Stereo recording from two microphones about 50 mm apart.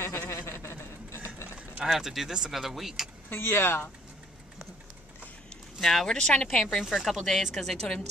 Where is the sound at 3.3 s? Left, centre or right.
Left.